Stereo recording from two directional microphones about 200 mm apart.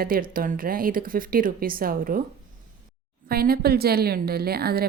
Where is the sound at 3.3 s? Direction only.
50° right (ahead or behind).